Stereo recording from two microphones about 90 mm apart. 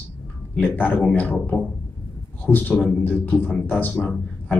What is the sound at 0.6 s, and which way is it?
A man's voice, 20° left (ahead or behind).